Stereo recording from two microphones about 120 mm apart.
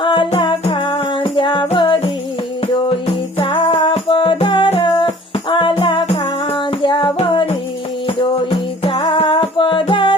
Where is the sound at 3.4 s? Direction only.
45° left (ahead or behind).